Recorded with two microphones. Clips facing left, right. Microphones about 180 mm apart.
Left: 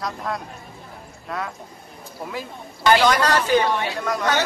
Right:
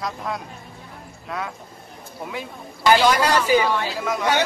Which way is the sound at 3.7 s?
20° left (ahead or behind).